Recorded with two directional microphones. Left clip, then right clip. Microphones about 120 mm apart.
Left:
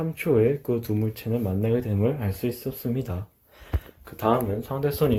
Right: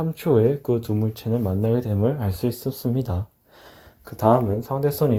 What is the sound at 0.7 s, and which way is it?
Speech, 25° right (ahead or behind).